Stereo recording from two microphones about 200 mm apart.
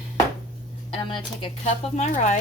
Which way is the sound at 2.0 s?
35° left (ahead or behind).